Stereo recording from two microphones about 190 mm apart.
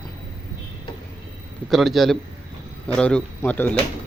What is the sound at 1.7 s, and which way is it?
A man's voice, centre (ahead or behind).